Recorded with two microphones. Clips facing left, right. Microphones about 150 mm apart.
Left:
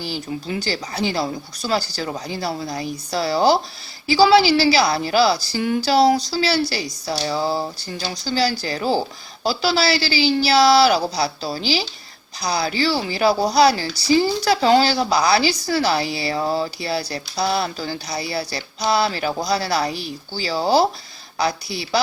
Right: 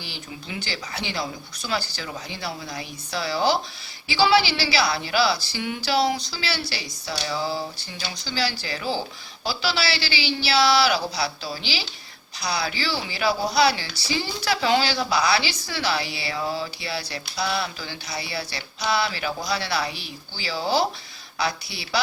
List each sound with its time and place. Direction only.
0.0 s a woman's voice: 40° left (ahead or behind)